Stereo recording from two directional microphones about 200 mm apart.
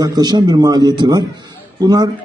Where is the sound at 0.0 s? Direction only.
20° right (ahead or behind).